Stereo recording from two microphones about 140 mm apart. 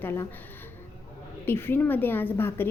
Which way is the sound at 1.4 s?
15° left (ahead or behind).